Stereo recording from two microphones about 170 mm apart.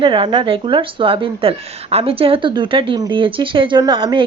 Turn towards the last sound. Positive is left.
turn(degrees=-30)  # may be behind; listen again after turning